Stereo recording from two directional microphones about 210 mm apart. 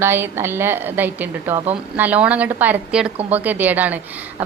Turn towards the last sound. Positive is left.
turn(degrees=-10)  # may be behind; listen again after turning